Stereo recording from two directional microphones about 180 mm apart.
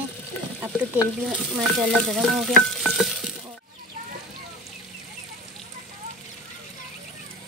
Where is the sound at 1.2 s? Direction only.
Centre (ahead or behind).